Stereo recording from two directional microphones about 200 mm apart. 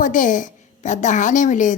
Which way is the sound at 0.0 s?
40° left (ahead or behind).